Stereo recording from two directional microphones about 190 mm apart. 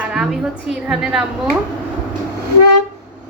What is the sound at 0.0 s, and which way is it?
A woman's voice, 5° right (ahead or behind).